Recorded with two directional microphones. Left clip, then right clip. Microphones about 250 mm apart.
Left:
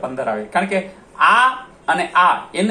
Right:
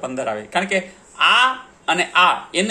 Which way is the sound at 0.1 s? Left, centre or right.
Right.